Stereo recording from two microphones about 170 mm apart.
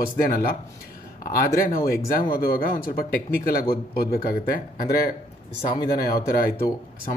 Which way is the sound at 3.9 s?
65° left (ahead or behind).